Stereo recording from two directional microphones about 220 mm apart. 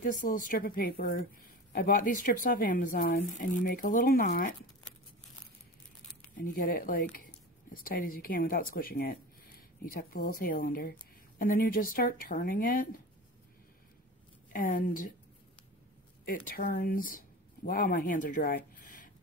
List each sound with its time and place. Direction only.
0.0 s a woman's voice: 40° left (ahead or behind)
6.3 s a woman's voice: 40° left (ahead or behind)
14.5 s a woman's voice: 40° left (ahead or behind)
16.4 s a woman's voice: 40° left (ahead or behind)